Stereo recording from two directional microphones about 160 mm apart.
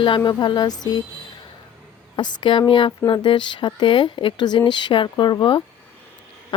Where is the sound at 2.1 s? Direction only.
30° left (ahead or behind).